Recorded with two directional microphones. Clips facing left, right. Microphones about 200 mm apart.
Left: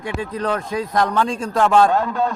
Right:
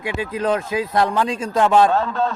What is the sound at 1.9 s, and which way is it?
Speech, 15° left (ahead or behind).